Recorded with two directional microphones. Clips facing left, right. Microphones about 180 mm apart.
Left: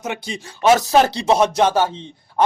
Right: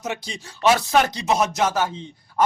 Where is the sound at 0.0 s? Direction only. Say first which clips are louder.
Left 3 dB; 55° left (ahead or behind).